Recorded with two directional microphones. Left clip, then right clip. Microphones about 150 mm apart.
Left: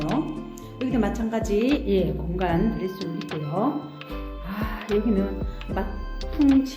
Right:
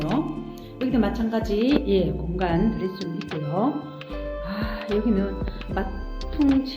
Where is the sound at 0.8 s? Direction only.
10° left (ahead or behind).